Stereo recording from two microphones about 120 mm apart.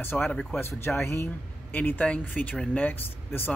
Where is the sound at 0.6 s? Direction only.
20° left (ahead or behind).